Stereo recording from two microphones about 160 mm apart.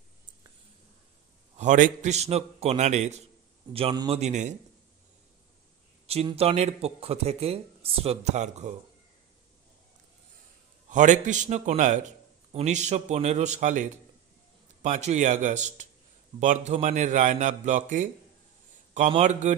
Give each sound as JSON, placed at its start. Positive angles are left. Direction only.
{"t": 1.6, "sound": "a man's voice", "side_deg": -50}
{"t": 3.7, "sound": "speech", "side_deg": -30}
{"t": 4.1, "sound": "a man's voice", "side_deg": -45}
{"t": 6.3, "sound": "speech", "side_deg": -40}
{"t": 10.9, "sound": "a man's voice", "side_deg": -50}